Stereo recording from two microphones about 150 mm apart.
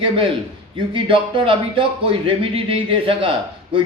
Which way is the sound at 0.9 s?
35° right (ahead or behind).